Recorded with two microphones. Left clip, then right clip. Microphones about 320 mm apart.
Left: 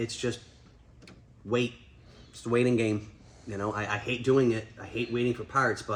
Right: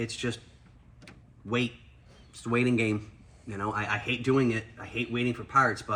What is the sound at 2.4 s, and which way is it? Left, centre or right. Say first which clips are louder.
Speech: left 1 dB; centre.